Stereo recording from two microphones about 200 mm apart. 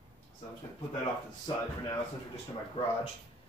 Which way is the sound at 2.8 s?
30° left (ahead or behind).